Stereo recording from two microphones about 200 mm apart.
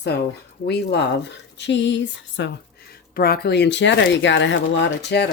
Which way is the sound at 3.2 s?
50° left (ahead or behind).